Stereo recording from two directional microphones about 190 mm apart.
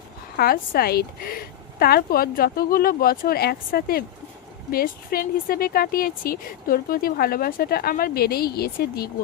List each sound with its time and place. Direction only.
0.3 s speech: 50° left (ahead or behind)